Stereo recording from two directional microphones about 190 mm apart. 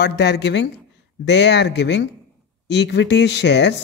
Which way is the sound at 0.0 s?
60° left (ahead or behind).